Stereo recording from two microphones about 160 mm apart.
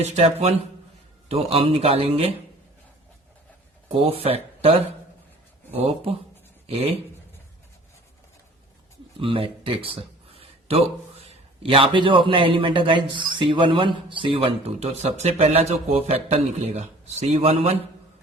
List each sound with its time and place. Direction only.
0.0 s a man's voice: 40° right (ahead or behind)
3.8 s a man's voice: 40° right (ahead or behind)
9.1 s a sound: 35° right (ahead or behind)
11.6 s a man's voice: 35° right (ahead or behind)